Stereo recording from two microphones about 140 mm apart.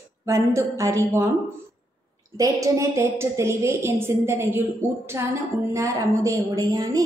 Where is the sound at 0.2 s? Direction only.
20° right (ahead or behind).